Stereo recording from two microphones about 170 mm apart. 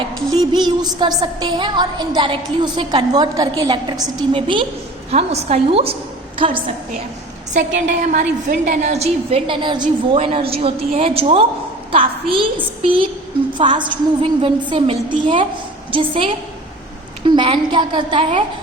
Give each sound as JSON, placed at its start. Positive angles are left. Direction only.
{"t": 0.3, "sound": "a woman's voice", "side_deg": -25}
{"t": 7.5, "sound": "a woman's voice", "side_deg": -45}